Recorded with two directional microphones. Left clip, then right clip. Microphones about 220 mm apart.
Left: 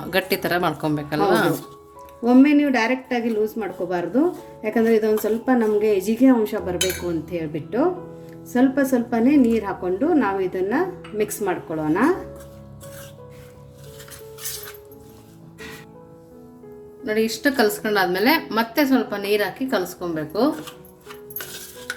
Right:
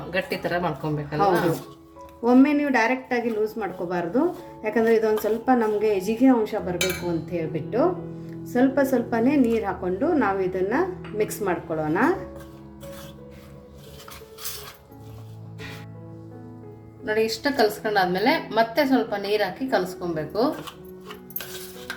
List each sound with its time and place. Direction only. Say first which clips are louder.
0.1 s speech: left 4 dB; 50° left (ahead or behind)
2.2 s a woman's voice: left 3 dB; 5° left (ahead or behind)
17.1 s a woman's voice: left 2 dB; 10° left (ahead or behind)